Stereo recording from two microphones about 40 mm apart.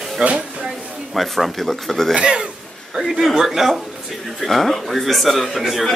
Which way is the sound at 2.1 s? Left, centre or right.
Right.